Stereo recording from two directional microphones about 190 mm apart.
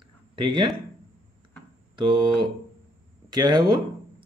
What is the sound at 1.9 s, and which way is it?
Speech, 25° right (ahead or behind).